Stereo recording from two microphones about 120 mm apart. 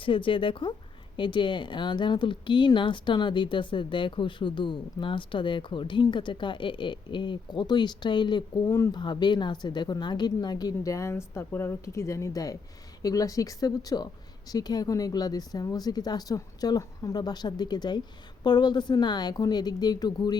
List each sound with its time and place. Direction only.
0.0 s speech: 45° left (ahead or behind)